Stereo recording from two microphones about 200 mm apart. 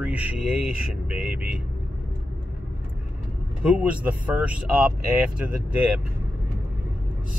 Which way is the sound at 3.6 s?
5° right (ahead or behind).